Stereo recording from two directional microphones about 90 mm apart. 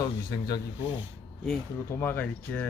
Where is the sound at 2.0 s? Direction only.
20° left (ahead or behind).